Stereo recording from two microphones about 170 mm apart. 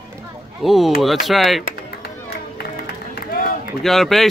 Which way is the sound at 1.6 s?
70° left (ahead or behind).